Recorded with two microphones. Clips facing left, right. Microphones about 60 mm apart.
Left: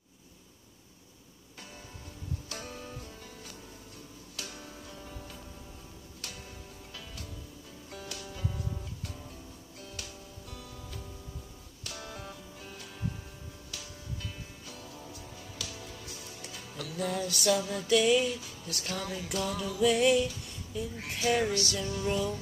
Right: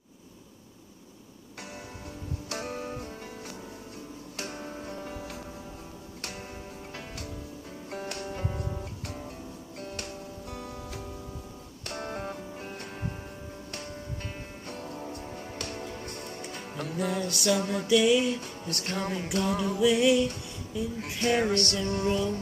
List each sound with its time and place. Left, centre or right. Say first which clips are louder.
2.5 s music: right 7 dB; right
7.9 s music: right 7 dB; right
17.2 s music: even; right
17.8 s music: right 2 dB; centre
18.2 s music: right 4 dB; right
19.8 s music: right 2 dB; centre
21.0 s music: right 2 dB; right